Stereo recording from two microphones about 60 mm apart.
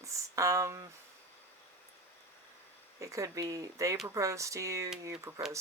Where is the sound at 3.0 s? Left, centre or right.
Right.